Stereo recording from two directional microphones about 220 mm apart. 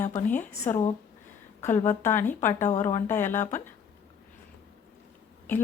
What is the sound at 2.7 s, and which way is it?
Speech, 35° left (ahead or behind).